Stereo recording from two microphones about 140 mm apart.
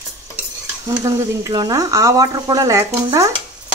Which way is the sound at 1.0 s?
25° right (ahead or behind).